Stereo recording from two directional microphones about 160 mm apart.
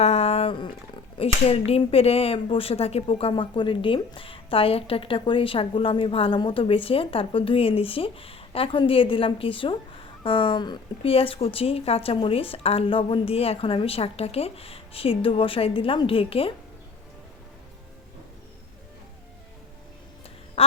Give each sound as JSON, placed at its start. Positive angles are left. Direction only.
{"t": 0.0, "sound": "a sound", "side_deg": 40}
{"t": 1.2, "sound": "speech", "side_deg": 40}
{"t": 20.6, "sound": "quack", "side_deg": 40}